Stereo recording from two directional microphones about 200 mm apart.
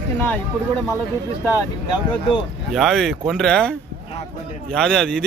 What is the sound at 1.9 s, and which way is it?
Speech, 25° left (ahead or behind).